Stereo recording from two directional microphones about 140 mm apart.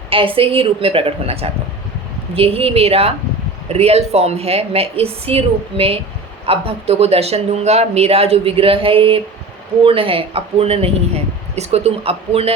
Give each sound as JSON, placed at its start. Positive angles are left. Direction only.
{"t": 0.1, "sound": "a woman's voice", "side_deg": -40}